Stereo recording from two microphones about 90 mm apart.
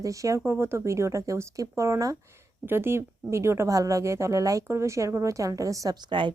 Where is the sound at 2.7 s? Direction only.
25° right (ahead or behind).